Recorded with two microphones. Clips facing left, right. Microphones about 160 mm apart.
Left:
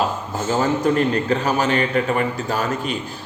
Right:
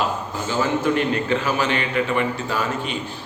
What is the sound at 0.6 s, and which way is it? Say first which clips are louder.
A man's voice: left 2 dB; 40° left (ahead or behind).